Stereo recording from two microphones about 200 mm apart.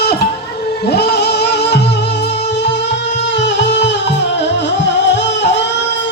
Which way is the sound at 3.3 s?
60° left (ahead or behind).